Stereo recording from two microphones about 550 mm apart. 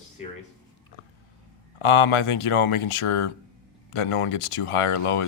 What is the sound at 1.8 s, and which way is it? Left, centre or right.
Speech, left.